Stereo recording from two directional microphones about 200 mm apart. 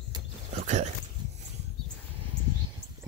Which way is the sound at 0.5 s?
35° right (ahead or behind).